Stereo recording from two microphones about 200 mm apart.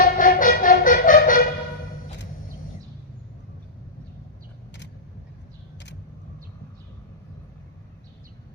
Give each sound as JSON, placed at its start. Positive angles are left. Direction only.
{"t": 0.0, "sound": "music", "side_deg": 45}